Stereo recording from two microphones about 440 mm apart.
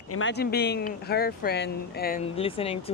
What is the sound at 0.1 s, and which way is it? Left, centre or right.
Speech, left.